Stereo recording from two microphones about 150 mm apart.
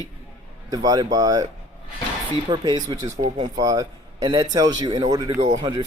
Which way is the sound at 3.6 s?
25° right (ahead or behind).